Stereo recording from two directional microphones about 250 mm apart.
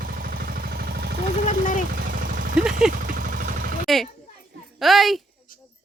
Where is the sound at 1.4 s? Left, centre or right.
Left.